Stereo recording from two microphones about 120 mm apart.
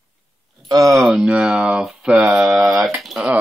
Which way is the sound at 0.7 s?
30° right (ahead or behind).